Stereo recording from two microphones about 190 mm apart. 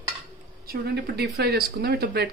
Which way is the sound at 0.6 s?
55° right (ahead or behind).